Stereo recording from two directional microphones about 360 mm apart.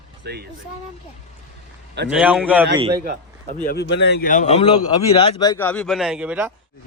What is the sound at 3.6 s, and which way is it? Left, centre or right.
Speech, left.